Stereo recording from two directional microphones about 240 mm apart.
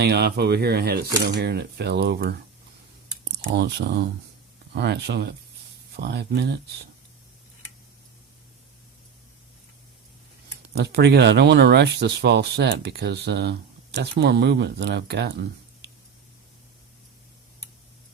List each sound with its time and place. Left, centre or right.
0.0 s speech: right
3.4 s speech: right
10.8 s speech: right